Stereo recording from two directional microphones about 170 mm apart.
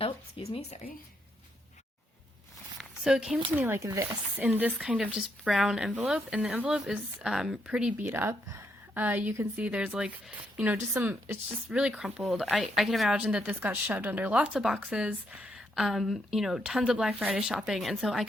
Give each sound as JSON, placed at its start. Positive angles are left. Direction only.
{"t": 0.0, "sound": "speech", "side_deg": 35}
{"t": 2.7, "sound": "a woman's voice", "side_deg": -5}